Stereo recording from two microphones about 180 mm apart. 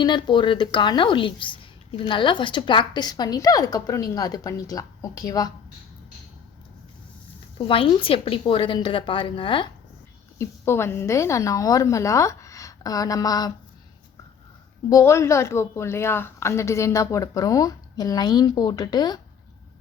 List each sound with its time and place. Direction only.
0.0 s speech: 25° left (ahead or behind)
7.7 s speech: 30° left (ahead or behind)
10.3 s a woman's voice: 15° left (ahead or behind)
14.8 s a woman's voice: 15° left (ahead or behind)